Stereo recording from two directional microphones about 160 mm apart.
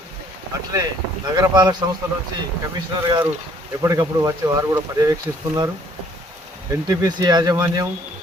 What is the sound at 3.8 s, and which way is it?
Speech, 20° right (ahead or behind).